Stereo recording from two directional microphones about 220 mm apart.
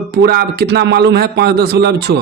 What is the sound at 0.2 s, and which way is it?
Speech, 45° right (ahead or behind).